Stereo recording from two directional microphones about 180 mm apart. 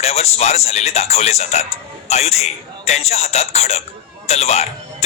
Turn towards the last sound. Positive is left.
turn(degrees=35)  # may be behind; listen again after turning